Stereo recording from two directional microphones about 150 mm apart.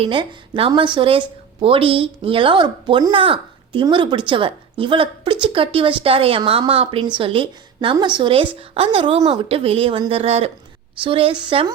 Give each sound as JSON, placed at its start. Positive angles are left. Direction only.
{"t": 0.0, "sound": "speech", "side_deg": -35}